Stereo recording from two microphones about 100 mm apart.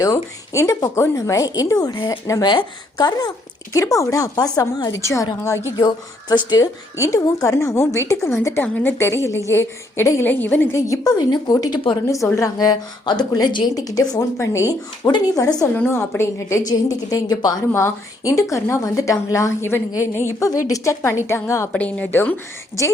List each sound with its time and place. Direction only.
0.0 s a woman's voice: 35° left (ahead or behind)
3.7 s a woman's voice: 35° left (ahead or behind)
5.7 s a woman's voice: 45° left (ahead or behind)
6.9 s a woman's voice: 30° left (ahead or behind)
15.6 s a woman's voice: 25° left (ahead or behind); by 17.5 s 40° left (ahead or behind)
17.7 s a woman's voice: 25° left (ahead or behind)
21.7 s a woman's voice: 15° left (ahead or behind)